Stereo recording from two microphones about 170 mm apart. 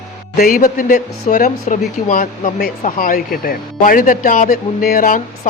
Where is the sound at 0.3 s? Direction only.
55° left (ahead or behind).